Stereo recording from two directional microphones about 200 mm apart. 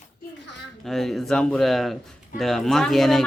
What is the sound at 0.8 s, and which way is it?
Speech, centre (ahead or behind).